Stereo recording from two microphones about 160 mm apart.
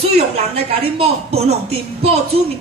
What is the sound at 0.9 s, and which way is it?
Speech, 40° right (ahead or behind).